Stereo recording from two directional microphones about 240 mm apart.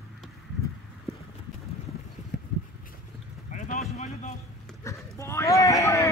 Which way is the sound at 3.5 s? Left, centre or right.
Left.